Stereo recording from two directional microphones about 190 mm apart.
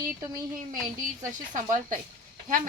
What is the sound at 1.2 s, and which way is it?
Speech, 45° right (ahead or behind).